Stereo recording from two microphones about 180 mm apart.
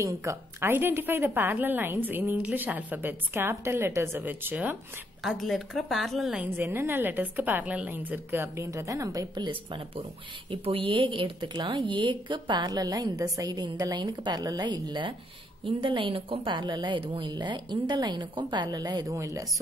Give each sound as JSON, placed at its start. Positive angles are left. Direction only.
{"t": 0.0, "sound": "a woman's voice", "side_deg": -15}